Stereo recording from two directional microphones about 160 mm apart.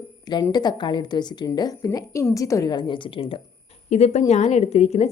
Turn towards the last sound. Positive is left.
turn(degrees=45)  # may be behind; listen again after turning